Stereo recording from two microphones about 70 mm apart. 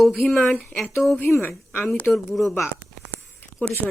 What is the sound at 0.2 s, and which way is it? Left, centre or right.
Speech, centre.